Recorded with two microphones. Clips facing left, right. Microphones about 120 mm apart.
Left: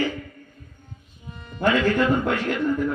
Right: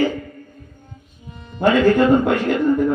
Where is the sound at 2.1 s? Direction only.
20° right (ahead or behind).